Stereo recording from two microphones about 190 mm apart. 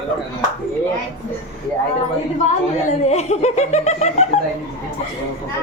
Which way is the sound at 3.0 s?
35° left (ahead or behind).